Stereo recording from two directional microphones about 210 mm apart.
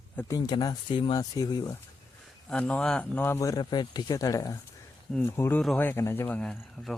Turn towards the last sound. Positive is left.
turn(degrees=5)  # may be behind; listen again after turning